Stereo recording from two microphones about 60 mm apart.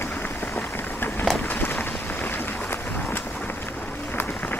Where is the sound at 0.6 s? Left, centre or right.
Left.